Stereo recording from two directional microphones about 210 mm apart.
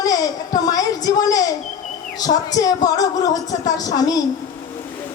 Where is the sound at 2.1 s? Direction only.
20° left (ahead or behind).